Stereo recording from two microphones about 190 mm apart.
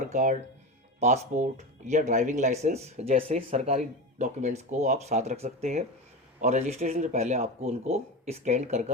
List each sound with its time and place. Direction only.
0.0 s speech: 40° right (ahead or behind)